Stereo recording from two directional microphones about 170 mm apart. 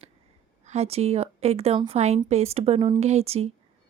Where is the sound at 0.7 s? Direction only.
40° right (ahead or behind).